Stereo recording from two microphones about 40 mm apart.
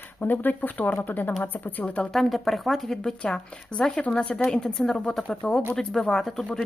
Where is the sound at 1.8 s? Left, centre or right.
Left.